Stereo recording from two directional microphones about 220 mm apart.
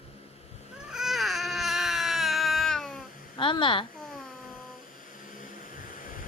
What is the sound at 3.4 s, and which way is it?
Speech, 20° left (ahead or behind).